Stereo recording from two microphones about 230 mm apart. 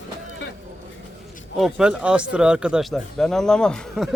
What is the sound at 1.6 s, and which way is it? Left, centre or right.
Speech, centre.